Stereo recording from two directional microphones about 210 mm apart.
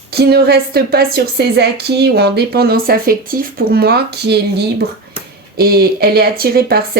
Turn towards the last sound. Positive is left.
turn(degrees=-45)  # may be behind; listen again after turning